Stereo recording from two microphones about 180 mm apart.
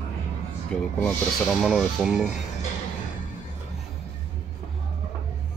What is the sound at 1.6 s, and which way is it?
Speech, centre (ahead or behind).